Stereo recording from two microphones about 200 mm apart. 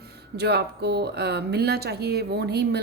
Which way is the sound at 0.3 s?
55° right (ahead or behind).